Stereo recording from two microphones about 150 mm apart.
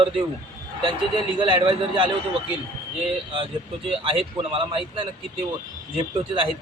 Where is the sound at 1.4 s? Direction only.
35° right (ahead or behind).